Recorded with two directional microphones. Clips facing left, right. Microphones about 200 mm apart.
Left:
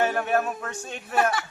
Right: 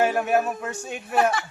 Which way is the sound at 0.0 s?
10° right (ahead or behind).